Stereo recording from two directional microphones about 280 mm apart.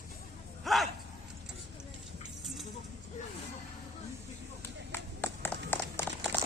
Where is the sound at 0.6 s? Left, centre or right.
Centre.